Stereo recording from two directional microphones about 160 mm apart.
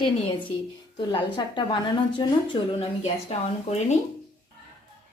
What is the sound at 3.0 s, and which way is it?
Speech, 45° left (ahead or behind).